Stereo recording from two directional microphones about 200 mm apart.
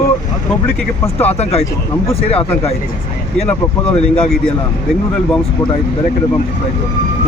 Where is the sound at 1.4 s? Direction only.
30° left (ahead or behind).